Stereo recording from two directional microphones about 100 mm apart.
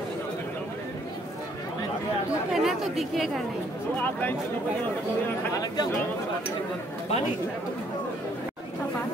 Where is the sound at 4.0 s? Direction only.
20° left (ahead or behind).